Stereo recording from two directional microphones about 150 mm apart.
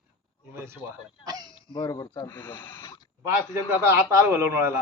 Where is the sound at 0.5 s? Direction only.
15° right (ahead or behind).